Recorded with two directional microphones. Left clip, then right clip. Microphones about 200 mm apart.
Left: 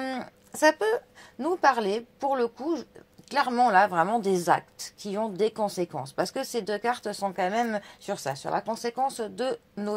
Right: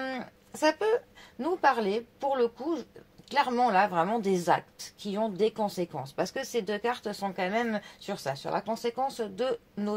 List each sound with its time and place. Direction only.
0.0 s speech: 35° left (ahead or behind)